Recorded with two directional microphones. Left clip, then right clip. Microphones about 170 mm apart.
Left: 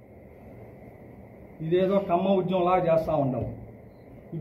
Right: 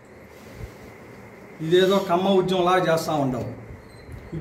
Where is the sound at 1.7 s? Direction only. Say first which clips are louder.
Right 5 dB; 45° right (ahead or behind).